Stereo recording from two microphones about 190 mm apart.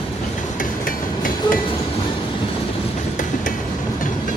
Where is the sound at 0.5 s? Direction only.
45° left (ahead or behind).